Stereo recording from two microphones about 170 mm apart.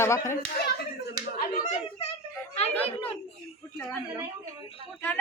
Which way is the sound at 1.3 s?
60° left (ahead or behind).